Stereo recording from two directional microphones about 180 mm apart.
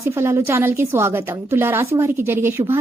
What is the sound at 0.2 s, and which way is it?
A woman's voice, 15° right (ahead or behind).